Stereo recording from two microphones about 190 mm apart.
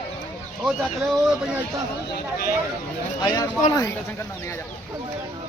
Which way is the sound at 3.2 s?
20° left (ahead or behind).